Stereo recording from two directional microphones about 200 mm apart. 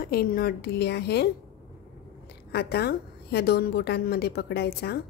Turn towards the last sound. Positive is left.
turn(degrees=55)  # may be behind; listen again after turning